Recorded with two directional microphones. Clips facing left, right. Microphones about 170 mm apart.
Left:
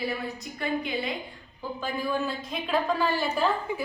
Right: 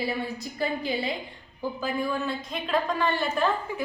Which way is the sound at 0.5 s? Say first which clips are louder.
Right 1 dB; 30° right (ahead or behind).